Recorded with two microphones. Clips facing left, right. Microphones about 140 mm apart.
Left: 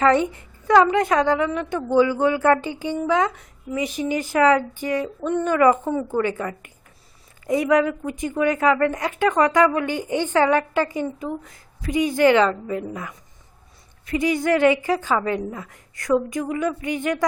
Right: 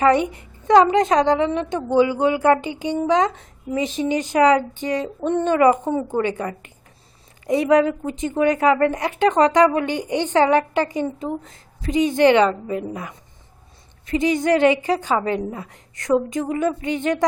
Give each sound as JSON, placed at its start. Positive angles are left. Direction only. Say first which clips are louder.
{"t": 0.0, "sound": "a woman's voice", "louder": "right 1 dB", "side_deg": -20}